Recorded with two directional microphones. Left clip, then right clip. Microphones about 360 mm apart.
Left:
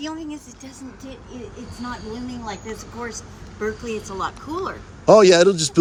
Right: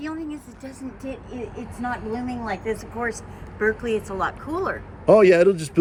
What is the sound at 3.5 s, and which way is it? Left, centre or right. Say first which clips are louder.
Speech: right 4 dB; centre.